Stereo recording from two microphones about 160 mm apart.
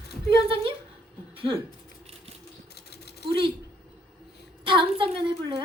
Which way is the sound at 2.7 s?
90° left.